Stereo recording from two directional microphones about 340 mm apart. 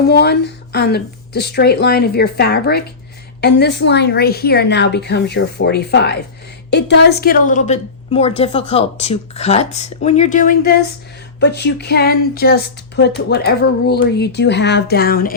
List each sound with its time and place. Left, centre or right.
0.1 s a woman's voice: left